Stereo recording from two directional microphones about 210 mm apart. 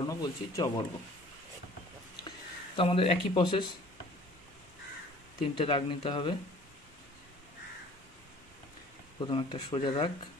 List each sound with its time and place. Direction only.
0.0 s speech: 15° left (ahead or behind)
2.2 s a sound: 25° left (ahead or behind)
5.4 s speech: 25° left (ahead or behind)
9.3 s speech: 20° left (ahead or behind)